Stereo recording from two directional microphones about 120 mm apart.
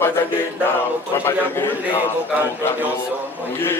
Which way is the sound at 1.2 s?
15° left (ahead or behind).